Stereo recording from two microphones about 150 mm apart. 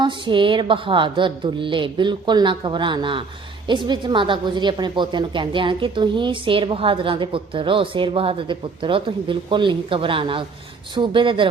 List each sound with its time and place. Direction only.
0.0 s a woman's voice: 30° right (ahead or behind)